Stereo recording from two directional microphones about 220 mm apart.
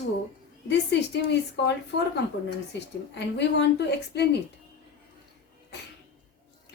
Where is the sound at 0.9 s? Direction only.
50° left (ahead or behind).